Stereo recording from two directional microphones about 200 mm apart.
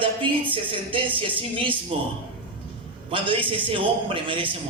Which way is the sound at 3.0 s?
25° right (ahead or behind).